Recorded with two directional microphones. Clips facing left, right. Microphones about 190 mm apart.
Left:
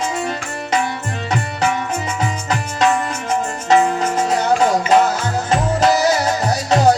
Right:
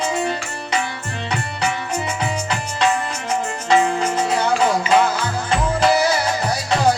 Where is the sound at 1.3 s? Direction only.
45° left (ahead or behind).